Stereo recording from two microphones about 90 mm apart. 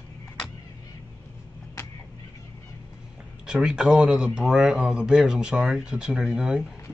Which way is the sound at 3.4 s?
10° right (ahead or behind).